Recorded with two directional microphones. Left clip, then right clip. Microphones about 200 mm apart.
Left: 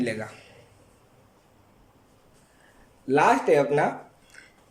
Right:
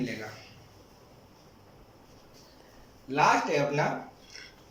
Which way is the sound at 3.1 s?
45° left (ahead or behind).